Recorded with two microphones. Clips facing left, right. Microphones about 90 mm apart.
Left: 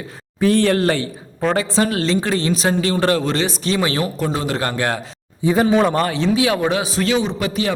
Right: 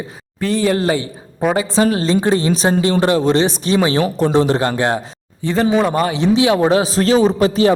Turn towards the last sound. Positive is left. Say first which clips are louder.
# right 8 dB
turn(degrees=-35)  # may be behind; listen again after turning